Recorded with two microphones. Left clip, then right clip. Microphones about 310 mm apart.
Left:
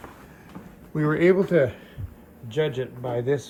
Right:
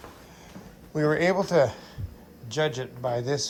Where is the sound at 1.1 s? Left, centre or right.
Centre.